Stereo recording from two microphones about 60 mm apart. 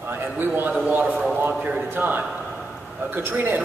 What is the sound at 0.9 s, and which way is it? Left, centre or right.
A man's voice, right.